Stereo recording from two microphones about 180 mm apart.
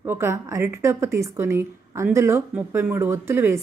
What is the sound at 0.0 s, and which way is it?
Speech, 15° right (ahead or behind).